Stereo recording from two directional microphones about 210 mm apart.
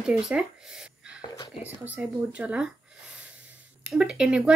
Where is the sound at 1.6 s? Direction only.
10° right (ahead or behind).